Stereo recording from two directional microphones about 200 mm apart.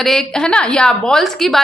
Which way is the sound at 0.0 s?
Centre (ahead or behind).